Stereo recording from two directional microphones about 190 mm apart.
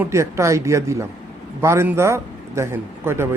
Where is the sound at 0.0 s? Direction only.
15° right (ahead or behind).